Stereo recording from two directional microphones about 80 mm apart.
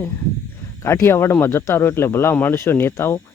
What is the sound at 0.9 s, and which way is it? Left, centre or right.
Speech, left.